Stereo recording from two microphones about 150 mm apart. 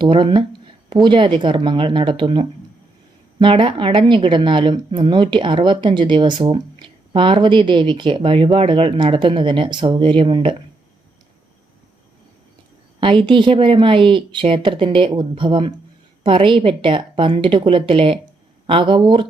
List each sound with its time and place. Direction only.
0.0 s speech: 35° right (ahead or behind)
13.0 s speech: 35° right (ahead or behind)